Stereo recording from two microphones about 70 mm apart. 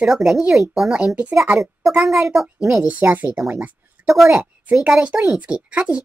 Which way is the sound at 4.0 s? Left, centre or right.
Right.